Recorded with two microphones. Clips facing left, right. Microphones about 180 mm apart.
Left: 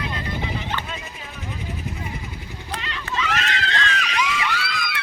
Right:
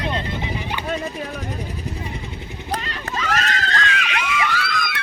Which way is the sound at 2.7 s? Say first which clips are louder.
Right 3 dB; 40° right (ahead or behind).